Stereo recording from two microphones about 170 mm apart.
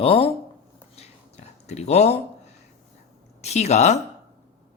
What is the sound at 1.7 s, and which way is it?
Speech, 40° left (ahead or behind).